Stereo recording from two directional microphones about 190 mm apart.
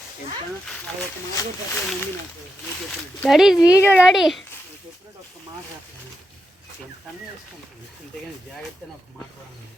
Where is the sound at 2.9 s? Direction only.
Centre (ahead or behind).